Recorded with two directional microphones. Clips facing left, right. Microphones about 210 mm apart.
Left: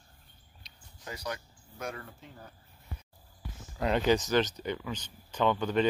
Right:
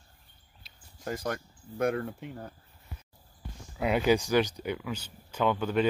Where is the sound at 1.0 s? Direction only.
50° right (ahead or behind).